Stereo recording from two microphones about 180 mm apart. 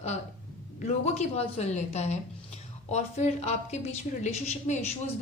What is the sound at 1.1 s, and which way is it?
A woman's voice, 40° left (ahead or behind).